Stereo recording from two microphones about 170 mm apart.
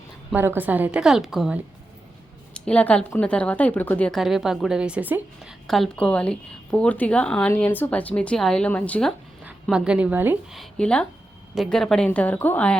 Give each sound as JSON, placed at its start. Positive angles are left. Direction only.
{"t": 0.3, "sound": "a woman's voice", "side_deg": -10}
{"t": 5.6, "sound": "speech", "side_deg": 0}
{"t": 9.6, "sound": "a woman's voice", "side_deg": -5}
{"t": 10.6, "sound": "a woman's voice", "side_deg": 5}